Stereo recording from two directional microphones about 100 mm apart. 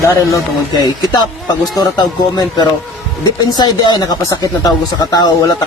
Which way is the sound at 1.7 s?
45° left (ahead or behind).